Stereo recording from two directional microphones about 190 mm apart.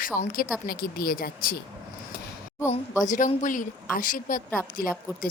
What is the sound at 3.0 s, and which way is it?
Speech, 40° left (ahead or behind).